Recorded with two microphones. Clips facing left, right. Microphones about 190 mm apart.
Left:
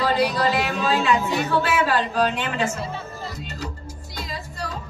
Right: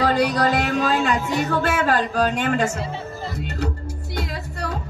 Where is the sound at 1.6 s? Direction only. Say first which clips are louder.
Right 1 dB; 50° right (ahead or behind).